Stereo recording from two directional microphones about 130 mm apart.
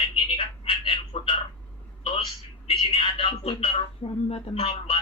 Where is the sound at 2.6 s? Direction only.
45° left (ahead or behind).